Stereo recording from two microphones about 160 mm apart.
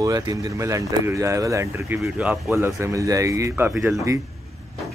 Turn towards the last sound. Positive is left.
turn(degrees=-10)  # may be behind; listen again after turning